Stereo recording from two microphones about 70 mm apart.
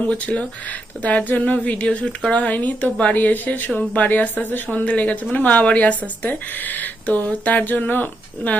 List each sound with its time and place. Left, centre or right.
0.1 s speech: centre